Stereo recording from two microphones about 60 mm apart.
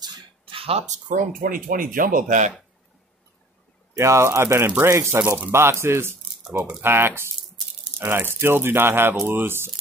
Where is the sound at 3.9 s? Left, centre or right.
Right.